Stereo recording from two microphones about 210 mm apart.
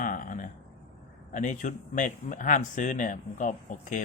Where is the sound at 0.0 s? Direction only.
40° left (ahead or behind).